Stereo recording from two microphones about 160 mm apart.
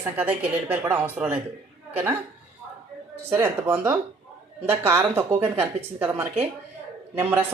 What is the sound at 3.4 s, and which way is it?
Speech, 15° right (ahead or behind).